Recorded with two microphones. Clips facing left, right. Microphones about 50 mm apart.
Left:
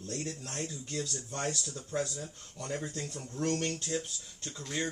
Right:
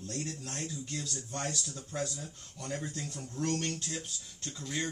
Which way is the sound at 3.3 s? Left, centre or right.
Left.